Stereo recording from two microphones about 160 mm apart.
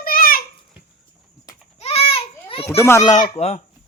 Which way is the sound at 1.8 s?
40° left (ahead or behind).